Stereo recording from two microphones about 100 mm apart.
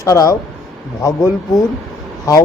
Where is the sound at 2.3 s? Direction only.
40° left (ahead or behind).